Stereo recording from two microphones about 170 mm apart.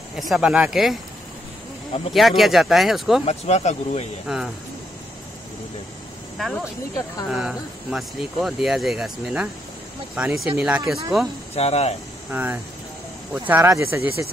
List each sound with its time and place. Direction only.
0.1 s speech: centre (ahead or behind)
2.1 s speech: centre (ahead or behind)
3.3 s speech: 40° left (ahead or behind)
4.3 s speech: 5° right (ahead or behind)
6.3 s speech: centre (ahead or behind)
11.5 s speech: 40° left (ahead or behind)
12.3 s speech: 10° right (ahead or behind)